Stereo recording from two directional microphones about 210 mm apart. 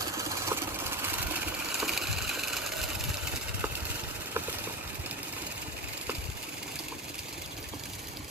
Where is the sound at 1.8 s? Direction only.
Centre (ahead or behind).